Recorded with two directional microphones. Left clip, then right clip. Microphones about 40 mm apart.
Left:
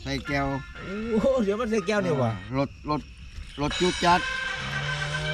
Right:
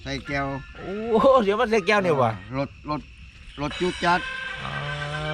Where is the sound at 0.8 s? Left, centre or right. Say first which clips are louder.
Right 3 dB; left.